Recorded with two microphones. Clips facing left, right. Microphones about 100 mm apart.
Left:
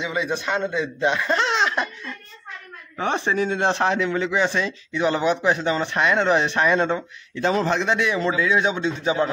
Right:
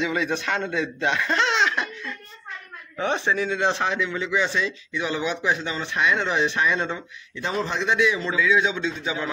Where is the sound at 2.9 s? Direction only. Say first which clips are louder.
Left 1 dB; 45° left (ahead or behind).